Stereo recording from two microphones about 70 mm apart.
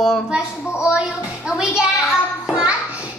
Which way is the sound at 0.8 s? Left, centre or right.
Centre.